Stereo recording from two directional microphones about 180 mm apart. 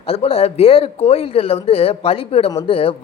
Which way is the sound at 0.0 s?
35° left (ahead or behind).